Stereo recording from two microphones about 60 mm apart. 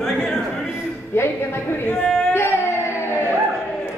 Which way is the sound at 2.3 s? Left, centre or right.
Left.